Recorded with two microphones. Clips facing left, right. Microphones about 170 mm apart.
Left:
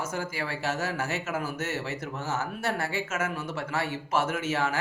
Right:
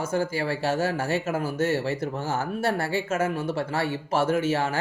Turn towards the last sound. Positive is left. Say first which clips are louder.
# right 5 dB
turn(degrees=-30)  # may be behind; listen again after turning